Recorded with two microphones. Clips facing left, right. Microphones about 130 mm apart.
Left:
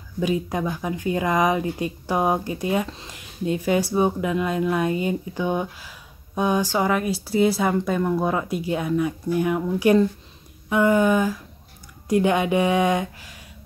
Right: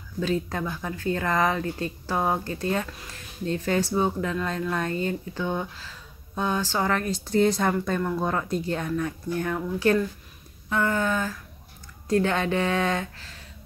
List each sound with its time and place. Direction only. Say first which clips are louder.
0.2 s speech: left 3 dB; 15° left (ahead or behind)